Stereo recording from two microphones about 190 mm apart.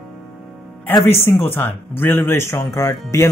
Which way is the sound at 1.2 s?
10° left (ahead or behind).